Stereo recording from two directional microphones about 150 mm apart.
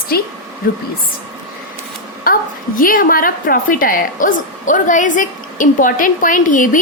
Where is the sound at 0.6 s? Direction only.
75° left (ahead or behind).